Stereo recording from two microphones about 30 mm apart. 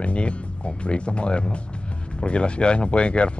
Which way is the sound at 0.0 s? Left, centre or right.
Left.